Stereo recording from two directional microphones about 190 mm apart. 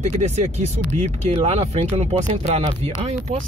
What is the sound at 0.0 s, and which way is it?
Speech, 35° right (ahead or behind).